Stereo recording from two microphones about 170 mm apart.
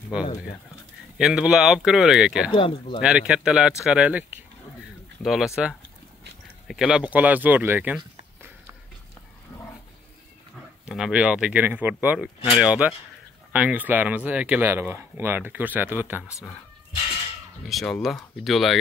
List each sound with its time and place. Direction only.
1.1 s speech: 5° right (ahead or behind)
2.5 s speech: 30° left (ahead or behind)
3.0 s speech: 5° right (ahead or behind)
6.7 s speech: 5° right (ahead or behind)
10.9 s speech: 5° right (ahead or behind)
16.3 s speech: 15° left (ahead or behind)
17.6 s speech: centre (ahead or behind)